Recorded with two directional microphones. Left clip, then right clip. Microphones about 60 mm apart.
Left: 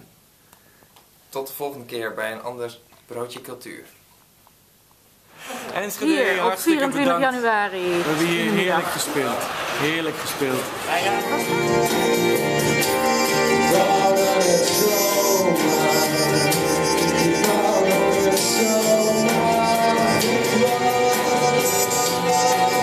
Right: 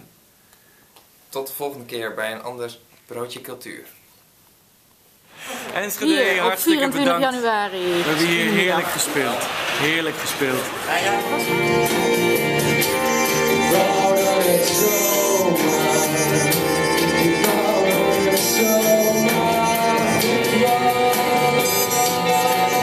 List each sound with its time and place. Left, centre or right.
1.3 s speech: centre
5.4 s a sound: centre
6.2 s speech: centre
7.4 s speech: centre
8.0 s speech: centre
8.3 s speech: centre
10.9 s speech: centre
11.4 s speech: right
12.4 s music: centre
14.7 s music: right
19.3 s music: centre